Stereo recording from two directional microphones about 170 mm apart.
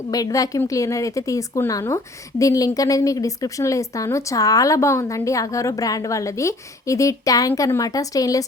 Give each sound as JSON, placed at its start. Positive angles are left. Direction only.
{"t": 0.1, "sound": "a woman's voice", "side_deg": 20}